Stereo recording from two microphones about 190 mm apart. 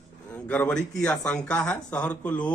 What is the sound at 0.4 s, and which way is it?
A man's voice, 5° left (ahead or behind).